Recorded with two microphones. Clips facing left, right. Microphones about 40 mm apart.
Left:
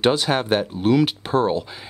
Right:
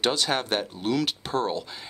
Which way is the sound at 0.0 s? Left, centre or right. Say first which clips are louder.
Left 6 dB; centre.